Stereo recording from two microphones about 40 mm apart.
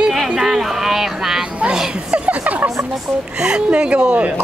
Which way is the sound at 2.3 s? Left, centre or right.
Right.